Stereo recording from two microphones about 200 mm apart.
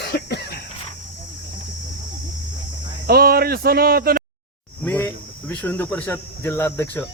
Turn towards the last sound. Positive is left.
turn(degrees=10)  # may be behind; listen again after turning